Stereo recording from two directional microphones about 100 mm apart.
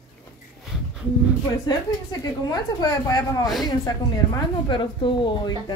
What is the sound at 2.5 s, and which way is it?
A woman's voice, 40° left (ahead or behind).